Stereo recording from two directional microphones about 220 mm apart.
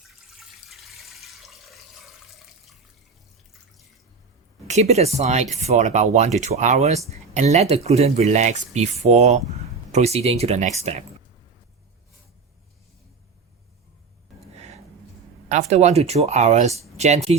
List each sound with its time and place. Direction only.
0.3 s water: centre (ahead or behind)
4.7 s speech: 30° right (ahead or behind)
14.4 s a sound: 30° right (ahead or behind)
15.4 s speech: 30° right (ahead or behind)